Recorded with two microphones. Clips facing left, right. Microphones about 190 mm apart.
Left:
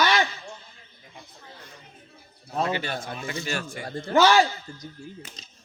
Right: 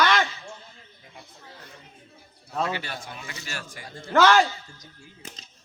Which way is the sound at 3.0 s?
45° left (ahead or behind).